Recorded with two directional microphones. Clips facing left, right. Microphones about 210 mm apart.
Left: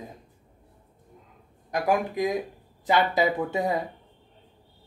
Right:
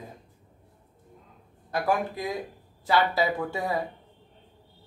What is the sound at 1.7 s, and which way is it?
A man's voice, 15° left (ahead or behind).